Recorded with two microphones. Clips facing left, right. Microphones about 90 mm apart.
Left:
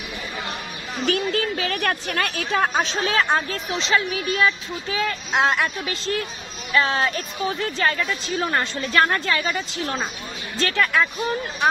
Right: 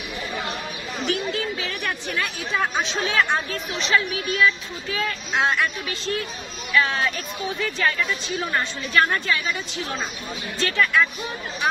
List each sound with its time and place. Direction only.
1.1 s a woman's voice: 55° left (ahead or behind); by 11.1 s 40° left (ahead or behind)